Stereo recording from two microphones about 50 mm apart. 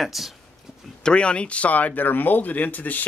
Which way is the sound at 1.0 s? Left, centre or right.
Centre.